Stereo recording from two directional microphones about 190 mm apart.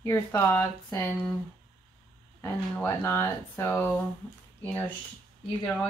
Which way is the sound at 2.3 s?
15° left (ahead or behind).